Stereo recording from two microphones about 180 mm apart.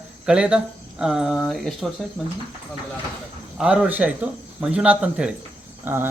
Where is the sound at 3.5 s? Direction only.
5° right (ahead or behind).